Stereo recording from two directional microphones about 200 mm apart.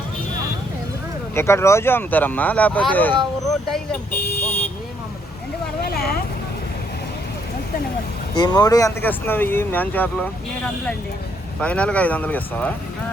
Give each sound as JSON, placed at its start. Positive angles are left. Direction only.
{"t": 1.4, "sound": "speech", "side_deg": 15}
{"t": 3.7, "sound": "vehicle", "side_deg": 5}
{"t": 5.8, "sound": "vehicle", "side_deg": 50}
{"t": 8.4, "sound": "speech", "side_deg": 20}
{"t": 11.6, "sound": "speech", "side_deg": 5}